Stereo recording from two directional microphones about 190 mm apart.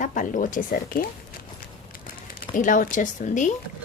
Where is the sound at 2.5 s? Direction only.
45° left (ahead or behind).